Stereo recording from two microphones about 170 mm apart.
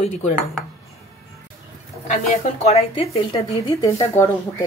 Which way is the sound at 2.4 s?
40° left (ahead or behind).